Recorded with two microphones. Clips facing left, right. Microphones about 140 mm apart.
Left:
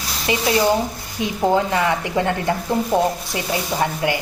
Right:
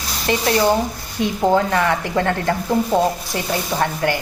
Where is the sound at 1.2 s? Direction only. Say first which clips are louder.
Right 2 dB; 15° left (ahead or behind).